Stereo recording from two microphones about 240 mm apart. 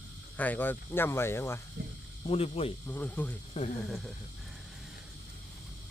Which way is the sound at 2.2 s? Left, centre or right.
Left.